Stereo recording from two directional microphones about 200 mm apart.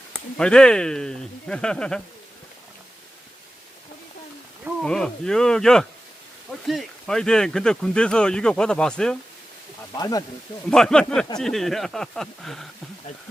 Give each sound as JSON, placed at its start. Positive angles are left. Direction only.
{"t": 0.1, "sound": "speech", "side_deg": 5}
{"t": 4.6, "sound": "speech", "side_deg": 0}
{"t": 9.9, "sound": "speech", "side_deg": 20}
{"t": 10.7, "sound": "speech", "side_deg": 5}